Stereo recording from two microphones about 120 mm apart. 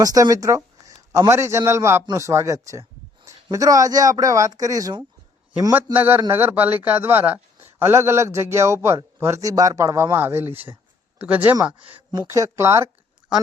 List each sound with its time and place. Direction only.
0.0 s a man's voice: 30° right (ahead or behind)
5.7 s a man's voice: 15° right (ahead or behind)
12.3 s a man's voice: 25° right (ahead or behind)